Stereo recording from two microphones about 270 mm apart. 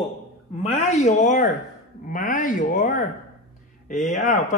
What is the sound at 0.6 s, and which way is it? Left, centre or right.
A man's voice, left.